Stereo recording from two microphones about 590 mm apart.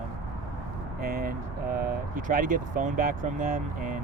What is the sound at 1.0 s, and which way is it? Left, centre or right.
Speech, centre.